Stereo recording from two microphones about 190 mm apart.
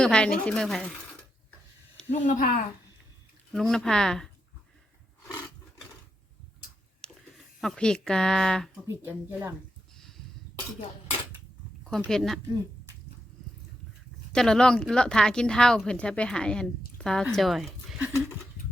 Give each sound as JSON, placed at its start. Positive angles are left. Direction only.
{"t": 0.0, "sound": "speech", "side_deg": 5}
{"t": 2.2, "sound": "speech", "side_deg": 45}
{"t": 3.5, "sound": "speech", "side_deg": 5}
{"t": 7.0, "sound": "a sound", "side_deg": 5}
{"t": 7.6, "sound": "speech", "side_deg": 0}
{"t": 8.9, "sound": "speech", "side_deg": -10}
{"t": 11.9, "sound": "speech", "side_deg": 0}
{"t": 14.3, "sound": "speech", "side_deg": 5}